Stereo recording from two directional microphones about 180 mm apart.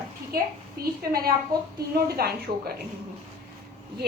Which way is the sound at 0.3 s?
55° right (ahead or behind).